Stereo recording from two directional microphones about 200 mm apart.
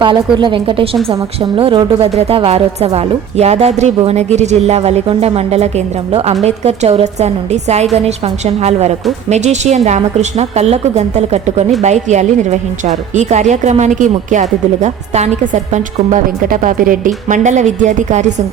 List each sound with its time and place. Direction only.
0.0 s a woman's voice: 25° right (ahead or behind)